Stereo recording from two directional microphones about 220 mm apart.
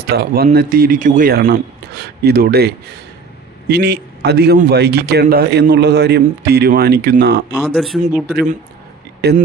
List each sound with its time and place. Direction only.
0.0 s a man's voice: 45° right (ahead or behind)
7.6 s speech: centre (ahead or behind)
8.3 s a man's voice: 40° right (ahead or behind)